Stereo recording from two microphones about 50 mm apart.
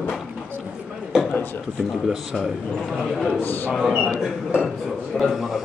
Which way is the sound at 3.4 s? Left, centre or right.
Left.